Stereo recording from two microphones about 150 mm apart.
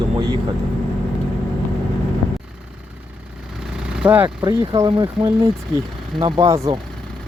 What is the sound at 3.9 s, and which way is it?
Speech, 10° right (ahead or behind).